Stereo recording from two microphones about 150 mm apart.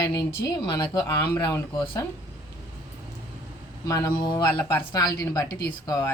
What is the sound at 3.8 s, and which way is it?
A woman's voice, 20° left (ahead or behind).